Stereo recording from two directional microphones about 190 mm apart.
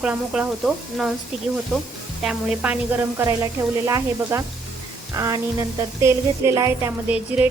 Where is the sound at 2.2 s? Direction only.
5° right (ahead or behind).